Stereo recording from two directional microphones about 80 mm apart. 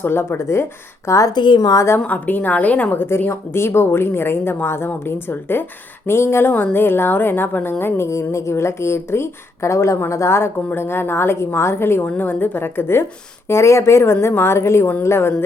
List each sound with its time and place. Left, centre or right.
0.0 s a woman's voice: left
1.3 s speech: left
2.0 s a woman's voice: left
6.5 s a woman's voice: left